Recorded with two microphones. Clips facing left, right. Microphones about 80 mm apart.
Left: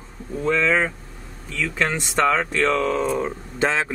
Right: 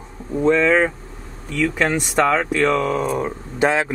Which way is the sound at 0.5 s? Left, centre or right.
Centre.